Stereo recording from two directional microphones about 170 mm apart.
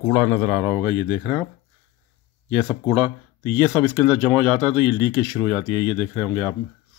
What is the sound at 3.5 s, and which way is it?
Speech, 25° right (ahead or behind).